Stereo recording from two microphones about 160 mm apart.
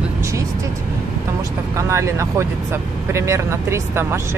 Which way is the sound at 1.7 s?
20° right (ahead or behind).